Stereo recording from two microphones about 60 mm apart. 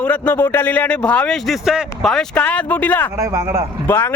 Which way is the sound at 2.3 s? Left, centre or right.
Left.